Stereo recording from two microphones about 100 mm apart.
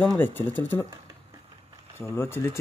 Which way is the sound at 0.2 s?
20° left (ahead or behind).